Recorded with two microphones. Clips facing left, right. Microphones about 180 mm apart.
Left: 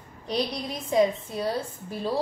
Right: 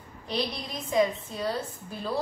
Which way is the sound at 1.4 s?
10° left (ahead or behind).